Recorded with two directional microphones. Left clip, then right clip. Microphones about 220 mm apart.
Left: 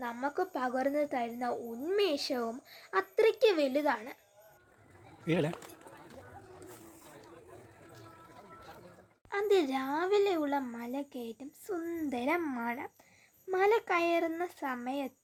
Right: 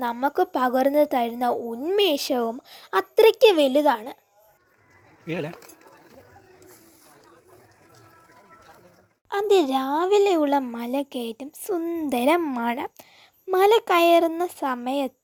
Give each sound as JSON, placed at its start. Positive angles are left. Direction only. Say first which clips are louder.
{"t": 0.0, "sound": "speech", "louder": "right 11 dB", "side_deg": -35}
{"t": 5.2, "sound": "speech", "louder": "right 2 dB", "side_deg": 5}
{"t": 9.3, "sound": "speech", "louder": "right 9 dB", "side_deg": -30}